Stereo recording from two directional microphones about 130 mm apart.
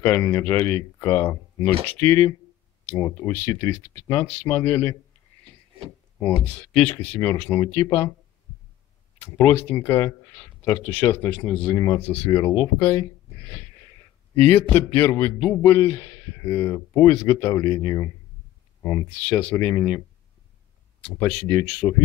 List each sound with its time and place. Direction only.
0.0 s speech: 15° left (ahead or behind)
6.4 s speech: 10° left (ahead or behind)
7.6 s speech: 30° left (ahead or behind)
9.4 s speech: 15° left (ahead or behind)
14.4 s speech: 15° left (ahead or behind)
19.2 s speech: 15° left (ahead or behind)
21.2 s speech: 25° left (ahead or behind)